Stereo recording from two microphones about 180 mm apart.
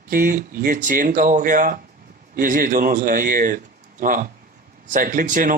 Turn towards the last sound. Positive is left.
turn(degrees=-50)  # may be behind; listen again after turning